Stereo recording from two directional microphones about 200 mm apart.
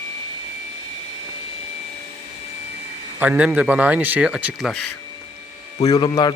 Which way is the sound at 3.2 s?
10° right (ahead or behind).